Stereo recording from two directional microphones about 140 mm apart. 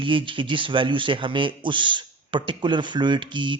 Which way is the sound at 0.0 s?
35° right (ahead or behind).